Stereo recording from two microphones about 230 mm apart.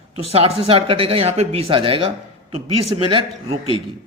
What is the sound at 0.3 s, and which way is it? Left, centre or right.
Speech, right.